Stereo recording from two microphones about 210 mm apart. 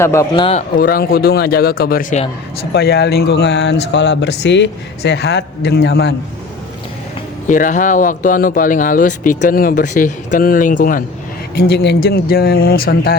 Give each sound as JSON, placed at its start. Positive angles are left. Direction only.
{"t": 0.0, "sound": "a man's voice", "side_deg": 15}
{"t": 0.8, "sound": "speech", "side_deg": 45}
{"t": 7.4, "sound": "speech", "side_deg": 40}
{"t": 11.5, "sound": "speech", "side_deg": 50}